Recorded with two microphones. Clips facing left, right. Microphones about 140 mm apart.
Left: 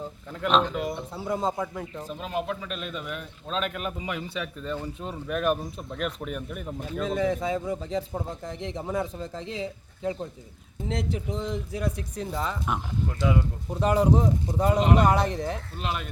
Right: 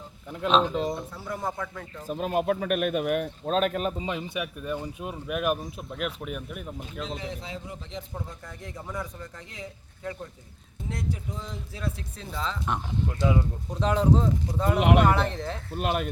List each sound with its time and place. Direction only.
0.7 s speech: 30° right (ahead or behind)
1.1 s speech: 20° left (ahead or behind)
2.0 s speech: 50° right (ahead or behind); by 7.0 s 5° right (ahead or behind)
7.0 s speech: 50° left (ahead or behind)
8.6 s speech: 25° left (ahead or behind)
11.3 s speech: 70° left (ahead or behind)
11.5 s speech: 15° left (ahead or behind)
13.1 s speech: 20° right (ahead or behind)
13.7 s speech: 10° left (ahead or behind)
14.8 s speech: 70° right (ahead or behind)
15.0 s speech: 15° left (ahead or behind)
15.7 s speech: 55° right (ahead or behind)